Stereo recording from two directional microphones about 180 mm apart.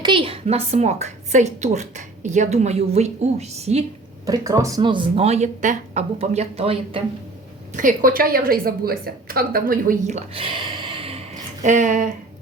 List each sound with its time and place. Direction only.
0.0 s a woman's voice: 30° right (ahead or behind)
4.3 s a woman's voice: 15° right (ahead or behind); by 7.0 s 35° right (ahead or behind)
7.7 s a woman's voice: 45° right (ahead or behind); by 11.2 s 30° right (ahead or behind)
11.6 s a woman's voice: 45° right (ahead or behind)